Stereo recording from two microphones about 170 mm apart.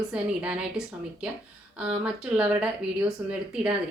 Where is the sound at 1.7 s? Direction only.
5° right (ahead or behind).